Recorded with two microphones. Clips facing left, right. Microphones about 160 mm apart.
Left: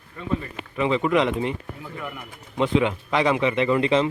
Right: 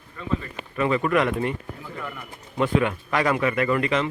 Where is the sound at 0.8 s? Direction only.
15° left (ahead or behind).